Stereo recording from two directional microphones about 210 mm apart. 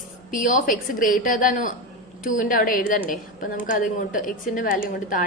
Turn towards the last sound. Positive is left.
turn(degrees=40)  # may be behind; listen again after turning